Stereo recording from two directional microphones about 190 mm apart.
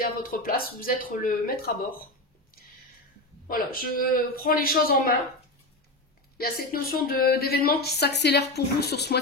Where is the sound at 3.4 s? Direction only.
50° left (ahead or behind).